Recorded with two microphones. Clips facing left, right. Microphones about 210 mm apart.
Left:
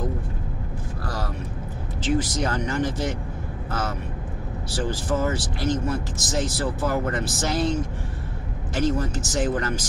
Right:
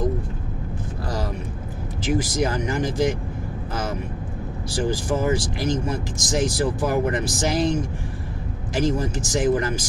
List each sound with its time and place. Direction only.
1.0 s vehicle: 15° right (ahead or behind)
2.0 s speech: 10° right (ahead or behind)
4.6 s speech: 10° right (ahead or behind)